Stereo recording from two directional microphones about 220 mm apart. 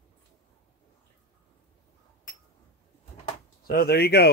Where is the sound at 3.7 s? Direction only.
45° left (ahead or behind).